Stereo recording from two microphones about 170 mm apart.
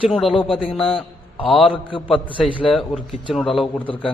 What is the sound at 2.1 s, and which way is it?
Speech, 30° left (ahead or behind).